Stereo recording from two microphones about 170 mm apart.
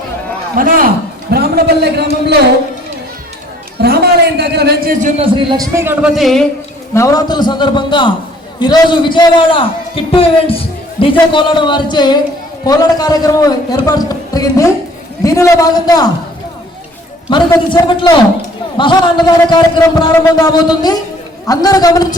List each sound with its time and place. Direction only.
0.5 s a man's voice: 55° right (ahead or behind)
1.3 s a man's voice: 65° right (ahead or behind)
3.8 s a sound: 70° right (ahead or behind)
4.4 s a man's voice: 70° right (ahead or behind)
5.0 s speech: 35° right (ahead or behind)
5.5 s a man's voice: 15° right (ahead or behind)
6.1 s a man's voice: centre (ahead or behind)
6.9 s a man's voice: 20° left (ahead or behind)
17.2 s a man's voice: 25° left (ahead or behind)